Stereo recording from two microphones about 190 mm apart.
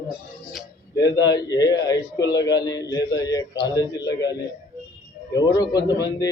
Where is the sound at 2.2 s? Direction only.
65° left (ahead or behind).